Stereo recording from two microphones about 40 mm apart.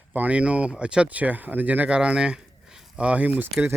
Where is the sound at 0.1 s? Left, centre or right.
Right.